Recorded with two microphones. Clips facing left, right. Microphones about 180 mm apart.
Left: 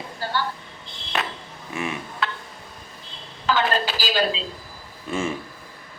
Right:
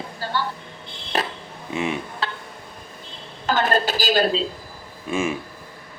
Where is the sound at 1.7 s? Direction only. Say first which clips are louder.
Right 4 dB; 20° right (ahead or behind).